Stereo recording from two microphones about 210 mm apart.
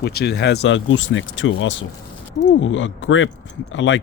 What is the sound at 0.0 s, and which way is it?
Speech, 50° left (ahead or behind).